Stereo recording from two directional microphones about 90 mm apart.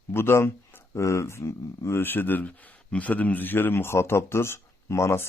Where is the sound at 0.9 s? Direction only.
35° left (ahead or behind).